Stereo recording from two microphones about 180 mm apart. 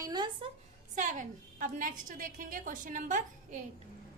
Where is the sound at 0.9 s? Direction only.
45° right (ahead or behind).